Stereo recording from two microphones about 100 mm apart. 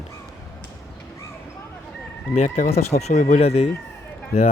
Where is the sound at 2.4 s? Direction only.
90° left.